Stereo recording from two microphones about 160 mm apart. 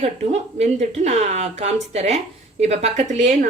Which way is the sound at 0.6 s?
45° right (ahead or behind).